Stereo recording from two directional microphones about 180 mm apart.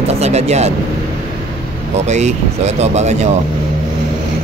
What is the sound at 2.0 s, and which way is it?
Speech, 40° right (ahead or behind).